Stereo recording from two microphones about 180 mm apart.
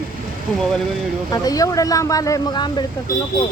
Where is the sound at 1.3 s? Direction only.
20° left (ahead or behind).